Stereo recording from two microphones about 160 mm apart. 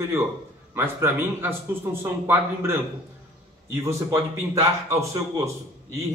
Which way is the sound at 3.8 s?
20° right (ahead or behind).